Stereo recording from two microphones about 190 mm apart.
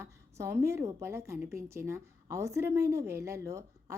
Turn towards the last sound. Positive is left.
turn(degrees=-15)  # may be behind; listen again after turning